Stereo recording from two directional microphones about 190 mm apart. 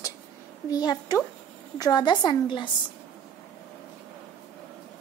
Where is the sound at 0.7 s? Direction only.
20° left (ahead or behind).